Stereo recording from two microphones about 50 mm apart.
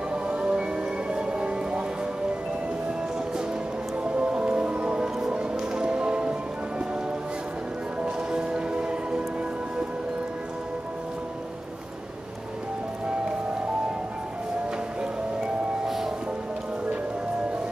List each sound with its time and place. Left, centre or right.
0.1 s music: right
4.0 s music: right
8.0 s music: centre
15.0 s music: centre